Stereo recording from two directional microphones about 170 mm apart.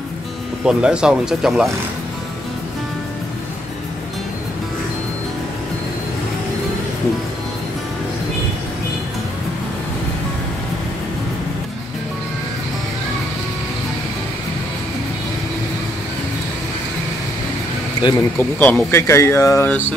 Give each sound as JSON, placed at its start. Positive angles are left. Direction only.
{"t": 0.7, "sound": "speech", "side_deg": -5}
{"t": 18.0, "sound": "speech", "side_deg": 30}
{"t": 18.4, "sound": "speech", "side_deg": 10}